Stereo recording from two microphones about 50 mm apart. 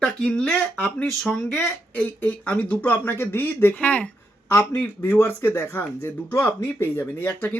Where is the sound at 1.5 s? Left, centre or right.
Left.